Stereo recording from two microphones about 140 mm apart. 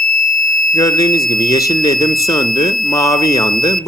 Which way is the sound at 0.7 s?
25° left (ahead or behind).